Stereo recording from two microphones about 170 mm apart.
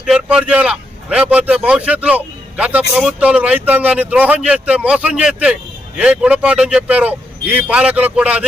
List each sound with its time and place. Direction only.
0.0 s a man's voice: 5° right (ahead or behind)